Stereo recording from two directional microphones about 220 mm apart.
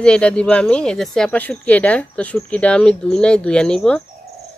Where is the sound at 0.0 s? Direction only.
5° left (ahead or behind).